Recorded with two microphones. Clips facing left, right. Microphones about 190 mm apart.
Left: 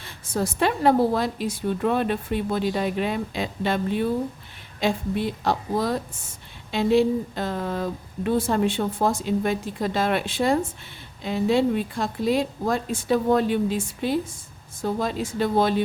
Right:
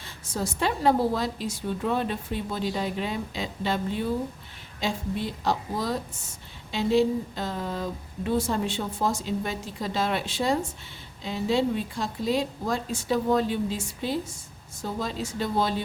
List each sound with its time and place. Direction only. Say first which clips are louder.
0.0 s a woman's voice: left 5 dB; 60° left (ahead or behind)